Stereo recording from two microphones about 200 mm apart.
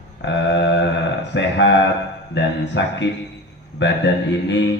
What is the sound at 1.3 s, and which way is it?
A man's voice, 60° left (ahead or behind).